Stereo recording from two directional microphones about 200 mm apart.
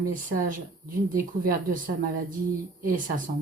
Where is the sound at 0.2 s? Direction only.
45° right (ahead or behind).